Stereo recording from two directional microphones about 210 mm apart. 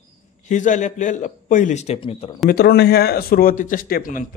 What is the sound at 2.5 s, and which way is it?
Speech, 50° left (ahead or behind).